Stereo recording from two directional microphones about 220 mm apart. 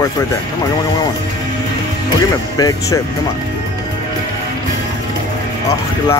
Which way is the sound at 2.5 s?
15° left (ahead or behind).